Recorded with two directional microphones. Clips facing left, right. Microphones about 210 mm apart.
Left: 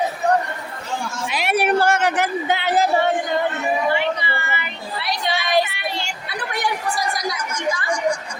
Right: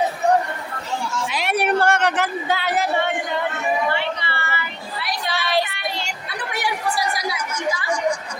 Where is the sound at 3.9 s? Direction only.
15° left (ahead or behind).